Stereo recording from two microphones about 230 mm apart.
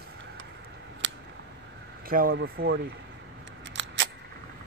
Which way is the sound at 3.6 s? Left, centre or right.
Right.